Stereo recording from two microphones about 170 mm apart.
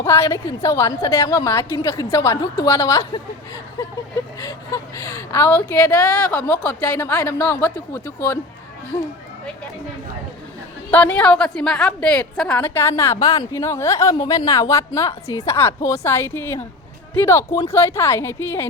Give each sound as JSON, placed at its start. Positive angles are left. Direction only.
{"t": 0.0, "sound": "a woman's voice", "side_deg": 15}
{"t": 5.1, "sound": "a woman's voice", "side_deg": 15}
{"t": 10.9, "sound": "a woman's voice", "side_deg": 10}